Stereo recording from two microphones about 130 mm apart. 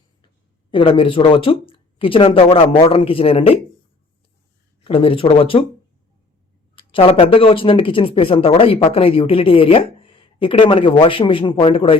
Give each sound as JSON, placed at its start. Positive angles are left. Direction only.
{"t": 0.7, "sound": "speech", "side_deg": 45}
{"t": 4.8, "sound": "speech", "side_deg": 45}
{"t": 6.7, "sound": "speech", "side_deg": 45}